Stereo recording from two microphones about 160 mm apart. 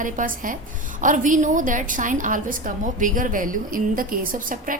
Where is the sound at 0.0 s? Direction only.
55° right (ahead or behind).